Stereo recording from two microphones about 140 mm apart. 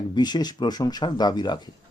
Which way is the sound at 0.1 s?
30° left (ahead or behind).